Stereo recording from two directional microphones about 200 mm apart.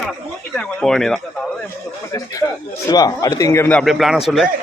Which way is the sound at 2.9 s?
20° left (ahead or behind).